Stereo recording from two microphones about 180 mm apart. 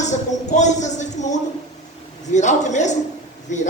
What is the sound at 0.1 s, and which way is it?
Speech, 40° left (ahead or behind).